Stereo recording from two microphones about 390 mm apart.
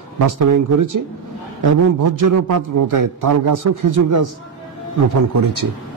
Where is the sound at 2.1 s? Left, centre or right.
Right.